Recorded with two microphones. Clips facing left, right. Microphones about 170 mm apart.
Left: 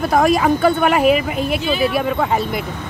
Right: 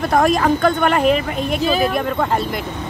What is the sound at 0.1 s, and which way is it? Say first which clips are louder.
Speech: left 1 dB; 5° left (ahead or behind).